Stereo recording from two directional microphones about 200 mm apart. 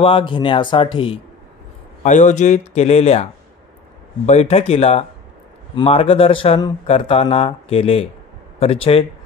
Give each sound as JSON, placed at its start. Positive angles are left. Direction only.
{"t": 0.0, "sound": "speech", "side_deg": 25}
{"t": 4.3, "sound": "speech", "side_deg": 30}